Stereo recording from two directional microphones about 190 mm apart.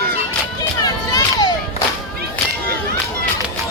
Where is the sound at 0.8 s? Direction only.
20° left (ahead or behind).